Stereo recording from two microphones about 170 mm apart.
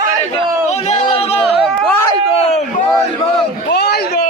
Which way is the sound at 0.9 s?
35° left (ahead or behind).